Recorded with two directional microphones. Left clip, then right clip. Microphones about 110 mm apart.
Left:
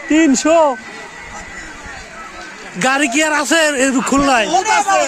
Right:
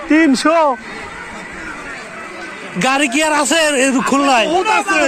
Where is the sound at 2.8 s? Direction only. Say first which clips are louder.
Even; 40° left (ahead or behind).